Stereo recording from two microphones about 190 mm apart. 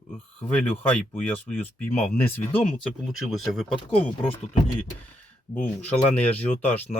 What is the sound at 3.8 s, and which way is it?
Speech, 30° left (ahead or behind).